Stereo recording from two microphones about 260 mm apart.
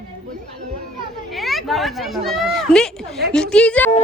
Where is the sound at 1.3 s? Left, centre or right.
Centre.